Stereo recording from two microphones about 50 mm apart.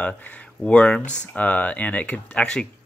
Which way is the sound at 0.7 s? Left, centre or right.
Left.